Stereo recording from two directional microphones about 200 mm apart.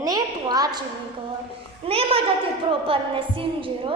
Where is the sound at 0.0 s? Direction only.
20° right (ahead or behind).